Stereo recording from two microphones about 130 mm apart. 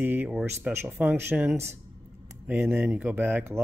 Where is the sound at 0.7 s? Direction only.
20° right (ahead or behind).